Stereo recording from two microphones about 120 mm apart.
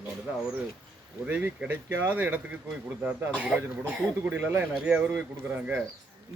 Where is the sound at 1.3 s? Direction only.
15° right (ahead or behind).